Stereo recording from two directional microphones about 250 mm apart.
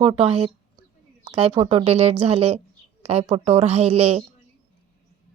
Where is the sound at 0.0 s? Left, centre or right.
Right.